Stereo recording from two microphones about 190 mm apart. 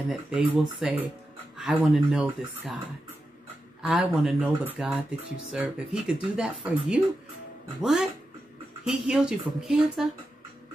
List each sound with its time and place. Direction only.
0.1 s speech: centre (ahead or behind)
3.8 s speech: centre (ahead or behind)